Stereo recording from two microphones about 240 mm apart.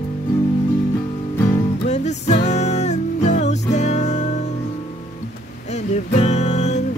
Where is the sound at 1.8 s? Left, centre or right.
Left.